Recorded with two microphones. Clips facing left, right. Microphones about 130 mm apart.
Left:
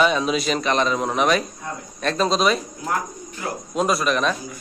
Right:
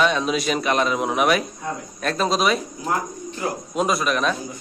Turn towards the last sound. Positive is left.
turn(degrees=0)  # may be behind; listen again after turning